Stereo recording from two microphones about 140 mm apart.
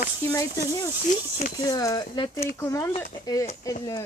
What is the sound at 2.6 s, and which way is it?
Speech, 15° left (ahead or behind).